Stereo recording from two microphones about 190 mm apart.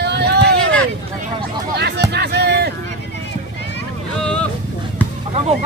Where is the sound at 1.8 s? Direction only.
60° right (ahead or behind).